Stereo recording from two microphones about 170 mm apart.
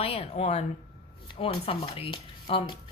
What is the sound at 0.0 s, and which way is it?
Speech, 35° left (ahead or behind).